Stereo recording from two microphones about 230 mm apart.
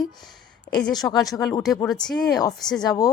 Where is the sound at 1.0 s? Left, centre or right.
Centre.